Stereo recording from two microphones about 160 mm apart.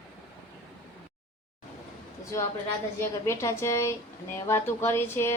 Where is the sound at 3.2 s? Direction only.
15° left (ahead or behind).